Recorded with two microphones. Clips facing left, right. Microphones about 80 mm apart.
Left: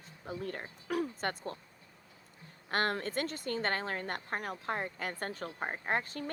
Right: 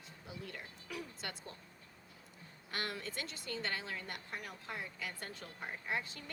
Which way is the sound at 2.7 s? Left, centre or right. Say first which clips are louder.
Left 9 dB; left.